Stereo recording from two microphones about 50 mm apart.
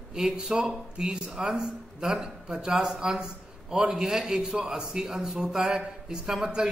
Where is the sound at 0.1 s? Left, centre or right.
Centre.